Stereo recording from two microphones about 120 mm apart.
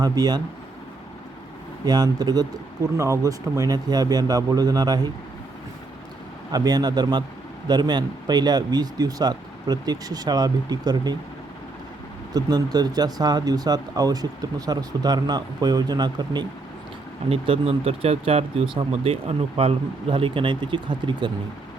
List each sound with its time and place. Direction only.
0.0 s speech: 35° right (ahead or behind)
1.8 s speech: 35° right (ahead or behind)
6.5 s speech: 35° right (ahead or behind)
12.3 s speech: 35° right (ahead or behind)
17.2 s speech: 50° right (ahead or behind)